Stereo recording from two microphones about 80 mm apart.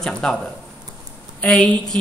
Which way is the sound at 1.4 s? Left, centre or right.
Centre.